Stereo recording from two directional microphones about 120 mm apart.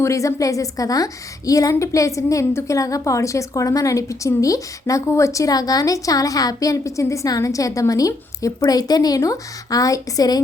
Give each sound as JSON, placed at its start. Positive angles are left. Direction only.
{"t": 0.0, "sound": "a woman's voice", "side_deg": 25}